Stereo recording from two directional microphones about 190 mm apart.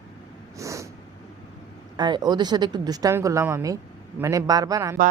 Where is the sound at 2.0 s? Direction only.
20° right (ahead or behind).